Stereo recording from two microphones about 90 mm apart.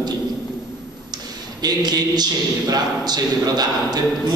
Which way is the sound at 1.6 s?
50° right (ahead or behind).